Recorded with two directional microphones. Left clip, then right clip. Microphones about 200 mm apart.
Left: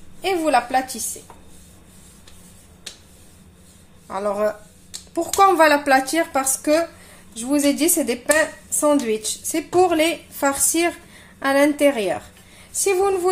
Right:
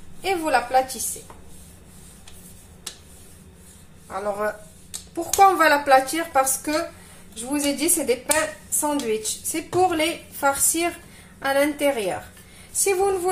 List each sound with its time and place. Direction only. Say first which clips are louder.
0.2 s a woman's voice: left 3 dB; 50° left (ahead or behind)
4.1 s a woman's voice: left 4 dB; 50° left (ahead or behind)